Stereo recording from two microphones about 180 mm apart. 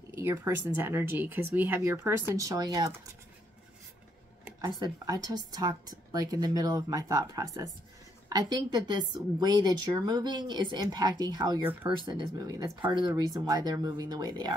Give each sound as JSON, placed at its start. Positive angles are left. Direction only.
{"t": 0.1, "sound": "speech", "side_deg": -15}
{"t": 4.6, "sound": "a woman's voice", "side_deg": -25}